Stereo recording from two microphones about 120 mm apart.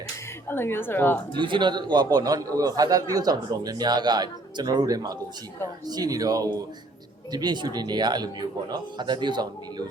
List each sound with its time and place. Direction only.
0.4 s speech: 20° left (ahead or behind)
1.4 s a man's voice: 40° right (ahead or behind)